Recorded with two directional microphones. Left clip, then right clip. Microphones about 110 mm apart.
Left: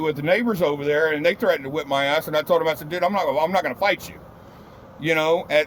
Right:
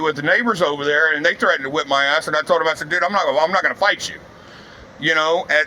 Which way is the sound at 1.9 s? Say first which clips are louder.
Right 3 dB; 45° left (ahead or behind).